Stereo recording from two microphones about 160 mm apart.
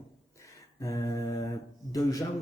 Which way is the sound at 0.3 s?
20° left (ahead or behind).